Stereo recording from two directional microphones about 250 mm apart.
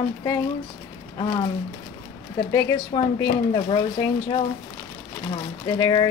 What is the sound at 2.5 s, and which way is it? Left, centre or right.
Speech, centre.